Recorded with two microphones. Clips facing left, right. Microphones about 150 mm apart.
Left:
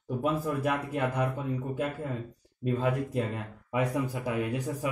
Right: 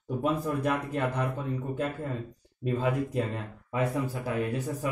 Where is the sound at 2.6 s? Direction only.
Centre (ahead or behind).